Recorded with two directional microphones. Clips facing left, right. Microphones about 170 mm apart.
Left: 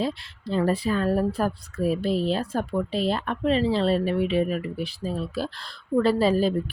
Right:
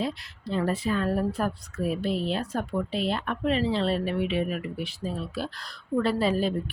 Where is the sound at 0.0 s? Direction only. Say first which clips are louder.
Left 3 dB; 35° left (ahead or behind).